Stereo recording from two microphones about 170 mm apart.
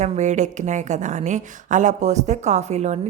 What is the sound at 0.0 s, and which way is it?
A woman's voice, 45° right (ahead or behind).